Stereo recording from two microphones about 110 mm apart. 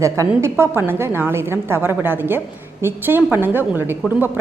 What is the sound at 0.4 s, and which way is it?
A woman's voice, 20° right (ahead or behind).